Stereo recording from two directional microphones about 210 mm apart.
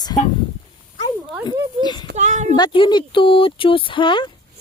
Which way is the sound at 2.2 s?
35° right (ahead or behind).